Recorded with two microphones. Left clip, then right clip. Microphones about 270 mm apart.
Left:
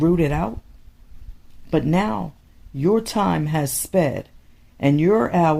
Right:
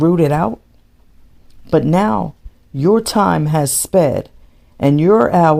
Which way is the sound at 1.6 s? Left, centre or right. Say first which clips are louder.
Right 7 dB; right.